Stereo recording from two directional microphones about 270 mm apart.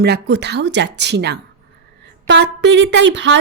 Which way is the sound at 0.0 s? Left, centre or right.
Right.